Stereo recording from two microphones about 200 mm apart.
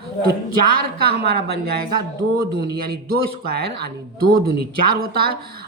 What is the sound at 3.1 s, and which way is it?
A woman's voice, 50° right (ahead or behind).